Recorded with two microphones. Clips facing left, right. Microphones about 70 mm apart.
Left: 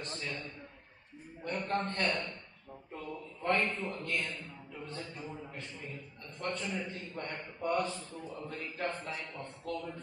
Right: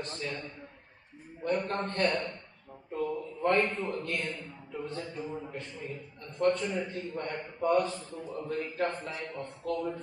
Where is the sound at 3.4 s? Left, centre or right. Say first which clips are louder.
Right 4 dB; right.